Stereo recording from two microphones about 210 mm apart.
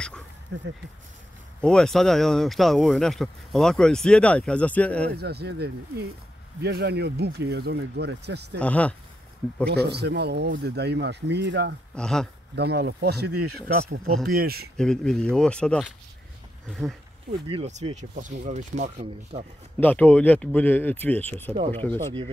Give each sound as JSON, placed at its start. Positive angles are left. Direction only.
{"t": 0.5, "sound": "speech", "side_deg": -55}
{"t": 1.6, "sound": "speech", "side_deg": 5}
{"t": 5.1, "sound": "speech", "side_deg": -50}
{"t": 8.5, "sound": "speech", "side_deg": 5}
{"t": 9.7, "sound": "speech", "side_deg": -50}
{"t": 11.9, "sound": "speech", "side_deg": 5}
{"t": 12.5, "sound": "speech", "side_deg": -50}
{"t": 14.3, "sound": "speech", "side_deg": -45}
{"t": 14.8, "sound": "speech", "side_deg": 5}
{"t": 17.5, "sound": "speech", "side_deg": -30}
{"t": 19.8, "sound": "speech", "side_deg": 10}
{"t": 21.9, "sound": "speech", "side_deg": -25}